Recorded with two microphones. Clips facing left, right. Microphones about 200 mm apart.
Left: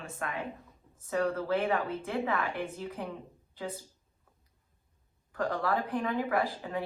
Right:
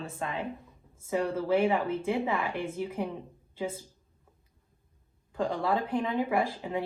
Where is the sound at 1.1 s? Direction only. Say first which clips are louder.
Right 2 dB; 15° right (ahead or behind).